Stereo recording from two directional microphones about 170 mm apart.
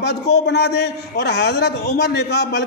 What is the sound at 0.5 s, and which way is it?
A man's voice, 75° left (ahead or behind).